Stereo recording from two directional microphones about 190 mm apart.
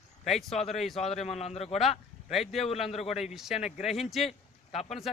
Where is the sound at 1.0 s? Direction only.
35° left (ahead or behind).